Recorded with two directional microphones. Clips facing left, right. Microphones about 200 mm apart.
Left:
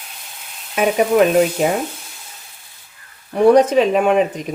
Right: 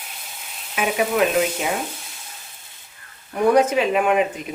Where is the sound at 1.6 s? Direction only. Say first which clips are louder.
Left 7 dB; 45° left (ahead or behind).